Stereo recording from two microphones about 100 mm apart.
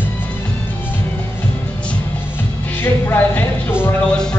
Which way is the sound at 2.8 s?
20° left (ahead or behind).